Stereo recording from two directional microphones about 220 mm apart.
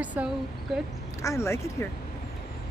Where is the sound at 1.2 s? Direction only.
15° left (ahead or behind).